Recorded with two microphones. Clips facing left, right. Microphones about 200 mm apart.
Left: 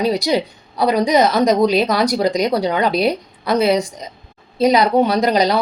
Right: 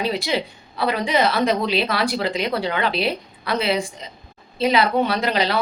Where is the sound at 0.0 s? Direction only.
40° left (ahead or behind).